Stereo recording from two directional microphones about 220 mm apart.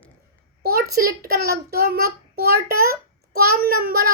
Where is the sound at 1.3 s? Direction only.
45° right (ahead or behind).